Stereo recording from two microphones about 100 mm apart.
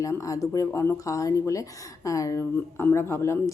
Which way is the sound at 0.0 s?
35° left (ahead or behind).